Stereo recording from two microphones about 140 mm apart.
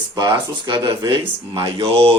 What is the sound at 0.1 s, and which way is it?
Speech, 30° right (ahead or behind).